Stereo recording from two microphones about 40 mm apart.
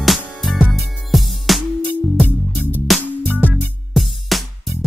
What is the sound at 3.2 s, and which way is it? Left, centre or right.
Music, left.